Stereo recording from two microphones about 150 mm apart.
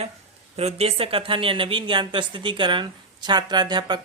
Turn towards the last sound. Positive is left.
turn(degrees=-30)  # may be behind; listen again after turning